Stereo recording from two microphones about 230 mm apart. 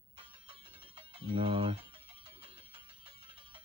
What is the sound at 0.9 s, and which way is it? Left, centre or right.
Speech, right.